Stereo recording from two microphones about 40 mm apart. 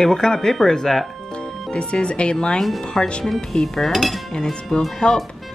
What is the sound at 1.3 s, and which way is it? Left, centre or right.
Speech, left.